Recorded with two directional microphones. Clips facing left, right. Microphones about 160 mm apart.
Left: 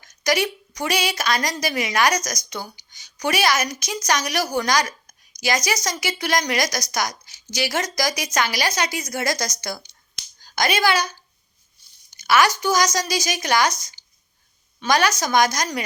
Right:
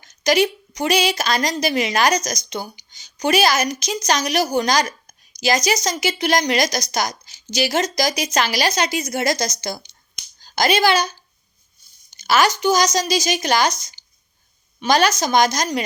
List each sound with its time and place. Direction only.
0.1 s a woman's voice: 25° right (ahead or behind)
12.1 s a woman's voice: 25° right (ahead or behind)